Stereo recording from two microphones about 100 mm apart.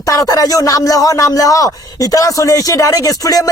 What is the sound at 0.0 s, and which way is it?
Speech, 35° left (ahead or behind).